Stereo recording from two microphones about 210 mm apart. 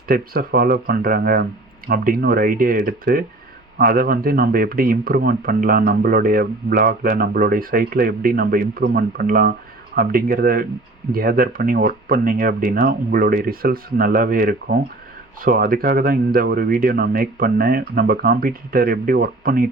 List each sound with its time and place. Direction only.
0.1 s speech: 45° right (ahead or behind)